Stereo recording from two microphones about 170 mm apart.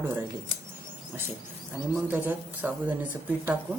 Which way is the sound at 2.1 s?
10° right (ahead or behind).